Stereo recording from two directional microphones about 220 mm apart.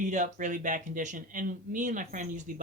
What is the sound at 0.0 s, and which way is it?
Speech, 35° right (ahead or behind).